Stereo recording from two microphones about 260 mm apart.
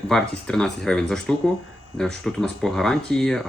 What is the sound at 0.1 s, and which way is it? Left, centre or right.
Speech, centre.